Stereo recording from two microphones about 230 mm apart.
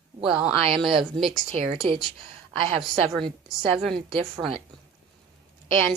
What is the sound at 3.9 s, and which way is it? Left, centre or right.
Speech, right.